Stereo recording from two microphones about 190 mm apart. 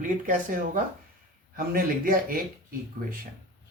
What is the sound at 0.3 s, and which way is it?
Speech, 45° right (ahead or behind).